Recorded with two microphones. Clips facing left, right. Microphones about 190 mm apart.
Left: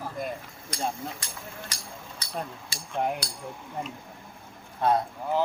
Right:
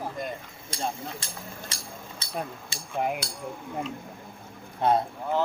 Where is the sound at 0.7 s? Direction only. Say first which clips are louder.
Left 1 dB; 30° right (ahead or behind).